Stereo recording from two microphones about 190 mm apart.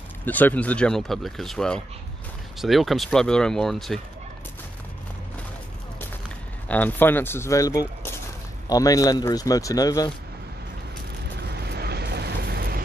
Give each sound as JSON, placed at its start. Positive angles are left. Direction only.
{"t": 0.2, "sound": "speech", "side_deg": 10}
{"t": 6.7, "sound": "speech", "side_deg": 10}
{"t": 11.7, "sound": "vehicle", "side_deg": -60}